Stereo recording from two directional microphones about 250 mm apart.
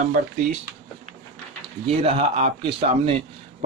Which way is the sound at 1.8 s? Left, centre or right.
Right.